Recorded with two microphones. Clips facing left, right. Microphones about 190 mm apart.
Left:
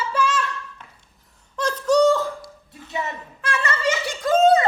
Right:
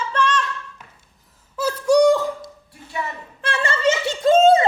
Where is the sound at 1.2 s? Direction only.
5° right (ahead or behind).